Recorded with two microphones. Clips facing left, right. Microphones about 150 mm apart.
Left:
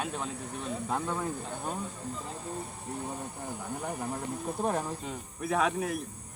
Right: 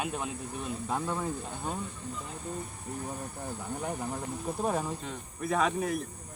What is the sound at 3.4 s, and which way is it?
Speech, 5° left (ahead or behind).